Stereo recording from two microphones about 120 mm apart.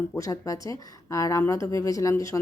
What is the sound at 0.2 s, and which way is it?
A woman's voice, 30° left (ahead or behind).